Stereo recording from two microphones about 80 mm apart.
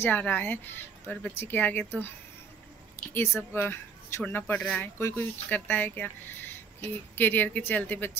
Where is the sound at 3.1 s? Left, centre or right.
Left.